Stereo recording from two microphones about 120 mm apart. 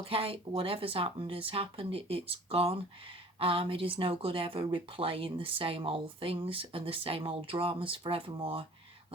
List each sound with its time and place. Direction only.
0.1 s speech: 50° right (ahead or behind)